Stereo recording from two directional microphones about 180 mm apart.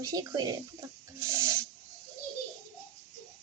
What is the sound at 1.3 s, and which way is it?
Snake, 15° right (ahead or behind).